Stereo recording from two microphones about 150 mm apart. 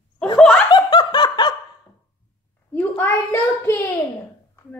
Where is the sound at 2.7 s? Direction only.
15° left (ahead or behind).